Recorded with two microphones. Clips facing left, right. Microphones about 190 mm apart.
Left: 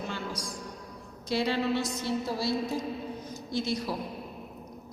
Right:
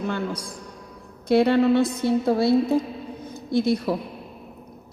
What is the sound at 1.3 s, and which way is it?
A woman's voice, 55° right (ahead or behind).